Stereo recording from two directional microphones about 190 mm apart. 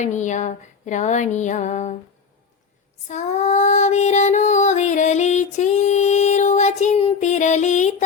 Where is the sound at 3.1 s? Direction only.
40° left (ahead or behind).